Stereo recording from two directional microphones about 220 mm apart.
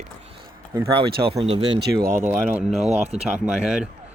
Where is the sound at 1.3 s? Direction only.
25° right (ahead or behind).